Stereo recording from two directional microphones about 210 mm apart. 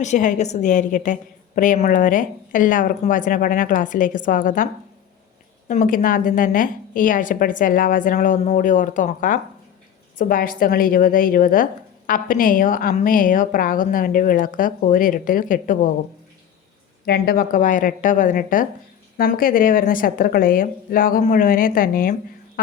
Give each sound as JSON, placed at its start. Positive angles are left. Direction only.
{"t": 0.0, "sound": "a woman's voice", "side_deg": 35}
{"t": 17.1, "sound": "a woman's voice", "side_deg": 45}